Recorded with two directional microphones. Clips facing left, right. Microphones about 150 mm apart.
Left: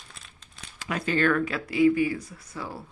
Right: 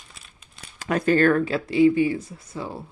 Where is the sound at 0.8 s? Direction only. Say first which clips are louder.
Right 6 dB; 45° right (ahead or behind); by 2.8 s 25° right (ahead or behind).